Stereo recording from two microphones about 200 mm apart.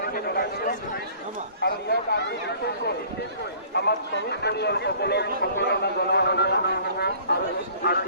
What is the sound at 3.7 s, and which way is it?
Speech, 55° left (ahead or behind).